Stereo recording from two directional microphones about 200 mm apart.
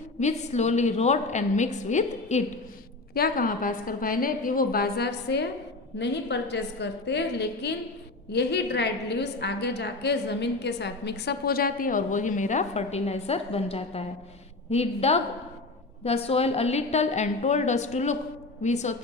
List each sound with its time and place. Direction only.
0.2 s a woman's voice: 35° left (ahead or behind)